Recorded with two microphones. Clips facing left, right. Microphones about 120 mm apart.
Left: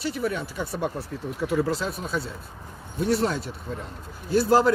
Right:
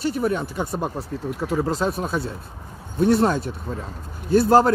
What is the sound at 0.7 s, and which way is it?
Speech, 35° right (ahead or behind).